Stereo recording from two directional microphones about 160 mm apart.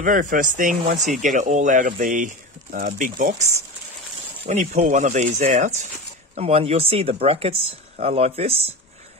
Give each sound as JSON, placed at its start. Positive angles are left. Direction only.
{"t": 0.0, "sound": "speech", "side_deg": -55}
{"t": 4.5, "sound": "speech", "side_deg": -55}